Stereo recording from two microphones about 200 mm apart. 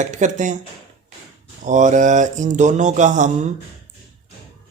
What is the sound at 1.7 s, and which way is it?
Speech, 40° right (ahead or behind).